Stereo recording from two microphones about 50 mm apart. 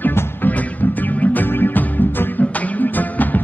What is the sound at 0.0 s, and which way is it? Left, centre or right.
Music, left.